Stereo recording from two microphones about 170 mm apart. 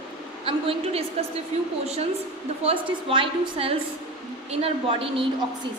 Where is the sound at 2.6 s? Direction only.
30° right (ahead or behind).